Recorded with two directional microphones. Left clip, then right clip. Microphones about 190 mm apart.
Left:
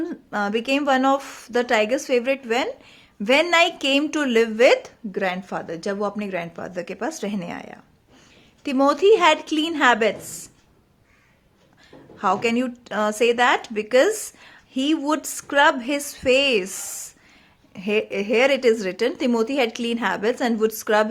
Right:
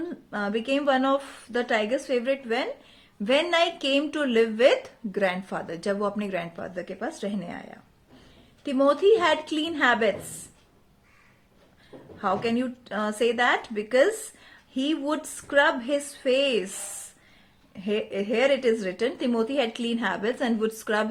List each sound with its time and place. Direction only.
0.0 s speech: 30° left (ahead or behind)
6.7 s speech: 30° left (ahead or behind)
12.2 s speech: 30° left (ahead or behind)
17.7 s speech: 30° left (ahead or behind)